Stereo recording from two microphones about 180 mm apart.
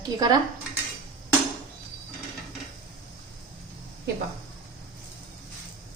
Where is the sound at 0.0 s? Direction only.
20° right (ahead or behind).